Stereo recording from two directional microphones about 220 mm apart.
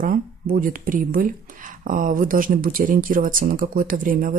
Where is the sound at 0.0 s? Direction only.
40° right (ahead or behind).